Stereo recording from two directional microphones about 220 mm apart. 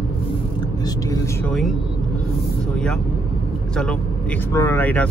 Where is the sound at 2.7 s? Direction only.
5° left (ahead or behind).